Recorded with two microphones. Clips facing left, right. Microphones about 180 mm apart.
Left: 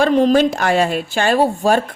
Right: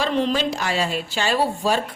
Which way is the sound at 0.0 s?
50° left (ahead or behind).